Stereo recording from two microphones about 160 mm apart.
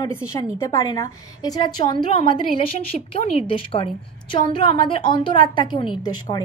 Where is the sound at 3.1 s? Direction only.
35° left (ahead or behind).